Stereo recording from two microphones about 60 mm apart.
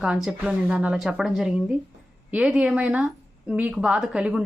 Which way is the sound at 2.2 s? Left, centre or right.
Centre.